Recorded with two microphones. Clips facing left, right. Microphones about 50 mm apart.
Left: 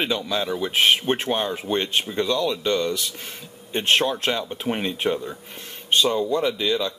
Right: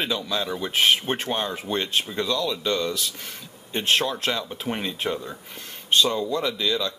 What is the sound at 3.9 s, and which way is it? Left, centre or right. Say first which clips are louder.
Speech: left 2 dB; left.